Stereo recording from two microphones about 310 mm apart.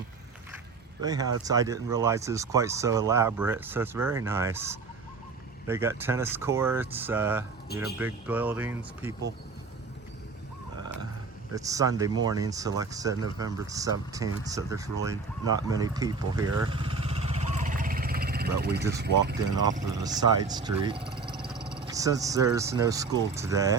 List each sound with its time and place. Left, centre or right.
1.0 s speech: centre
11.5 s speech: centre; by 18.8 s right
18.8 s speech: centre